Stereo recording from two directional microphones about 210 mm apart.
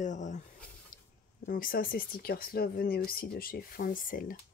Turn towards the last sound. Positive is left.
turn(degrees=40)  # may be behind; listen again after turning